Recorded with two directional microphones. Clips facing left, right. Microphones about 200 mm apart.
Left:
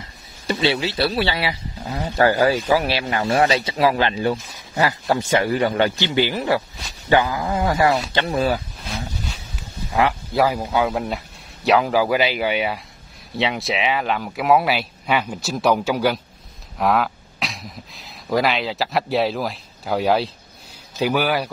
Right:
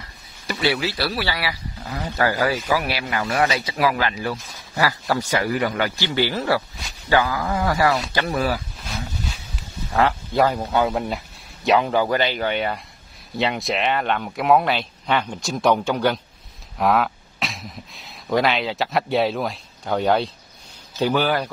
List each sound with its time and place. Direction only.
0.0 s speech: 25° left (ahead or behind)
9.9 s speech: 10° left (ahead or behind)